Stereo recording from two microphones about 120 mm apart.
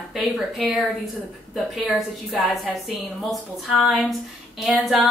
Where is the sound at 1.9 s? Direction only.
Centre (ahead or behind).